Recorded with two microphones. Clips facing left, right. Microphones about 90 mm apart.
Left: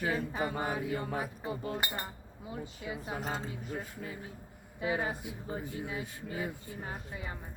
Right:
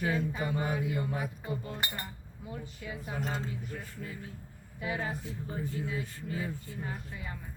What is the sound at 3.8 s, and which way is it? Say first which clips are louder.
A woman's voice: even; 20° left (ahead or behind).